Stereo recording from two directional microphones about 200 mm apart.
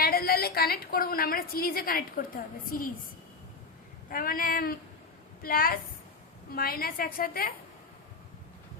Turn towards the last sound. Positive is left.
turn(degrees=45)  # may be behind; listen again after turning